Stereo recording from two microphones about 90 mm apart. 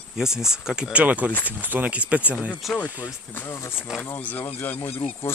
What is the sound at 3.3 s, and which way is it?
Speech, 25° left (ahead or behind).